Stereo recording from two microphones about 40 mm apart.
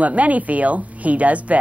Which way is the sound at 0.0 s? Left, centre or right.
Right.